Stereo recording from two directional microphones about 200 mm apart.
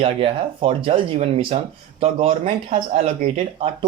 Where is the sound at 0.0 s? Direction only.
30° right (ahead or behind).